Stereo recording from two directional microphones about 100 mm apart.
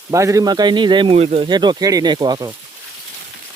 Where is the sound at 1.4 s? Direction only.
45° right (ahead or behind).